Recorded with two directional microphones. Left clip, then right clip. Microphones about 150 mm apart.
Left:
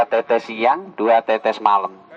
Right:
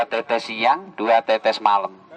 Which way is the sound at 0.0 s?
20° right (ahead or behind).